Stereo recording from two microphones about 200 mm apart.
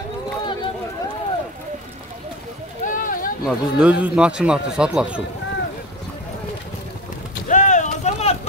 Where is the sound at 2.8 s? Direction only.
40° left (ahead or behind).